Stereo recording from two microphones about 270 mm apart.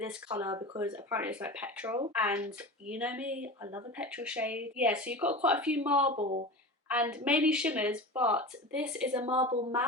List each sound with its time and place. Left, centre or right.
0.0 s speech: centre
6.1 s speech: right
6.8 s speech: centre